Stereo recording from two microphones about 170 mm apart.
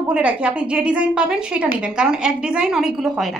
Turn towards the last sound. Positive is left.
turn(degrees=0)  # may be behind; listen again after turning